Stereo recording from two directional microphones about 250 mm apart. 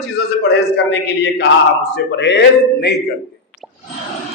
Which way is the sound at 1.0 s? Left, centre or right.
Left.